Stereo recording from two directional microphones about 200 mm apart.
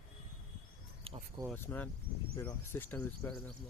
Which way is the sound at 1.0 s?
30° right (ahead or behind).